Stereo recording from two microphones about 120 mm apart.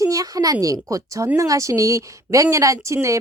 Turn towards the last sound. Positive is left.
turn(degrees=-25)  # may be behind; listen again after turning